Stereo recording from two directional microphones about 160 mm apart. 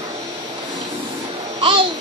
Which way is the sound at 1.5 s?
35° right (ahead or behind).